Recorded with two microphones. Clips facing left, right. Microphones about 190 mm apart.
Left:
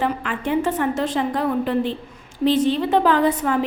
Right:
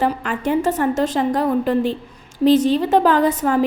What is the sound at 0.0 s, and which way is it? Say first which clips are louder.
A woman's voice: right 3 dB; 40° right (ahead or behind).